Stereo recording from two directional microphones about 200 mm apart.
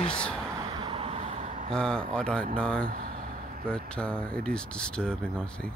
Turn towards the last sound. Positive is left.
turn(degrees=5)  # may be behind; listen again after turning